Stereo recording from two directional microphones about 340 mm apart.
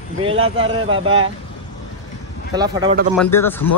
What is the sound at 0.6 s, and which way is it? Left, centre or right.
Speech, centre.